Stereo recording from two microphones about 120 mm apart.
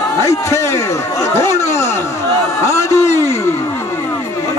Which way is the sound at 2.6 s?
20° left (ahead or behind).